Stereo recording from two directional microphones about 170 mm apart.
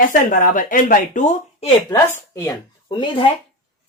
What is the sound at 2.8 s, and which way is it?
Speech, 30° left (ahead or behind).